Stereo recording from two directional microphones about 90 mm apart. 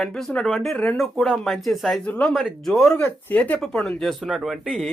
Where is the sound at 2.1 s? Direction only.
15° left (ahead or behind).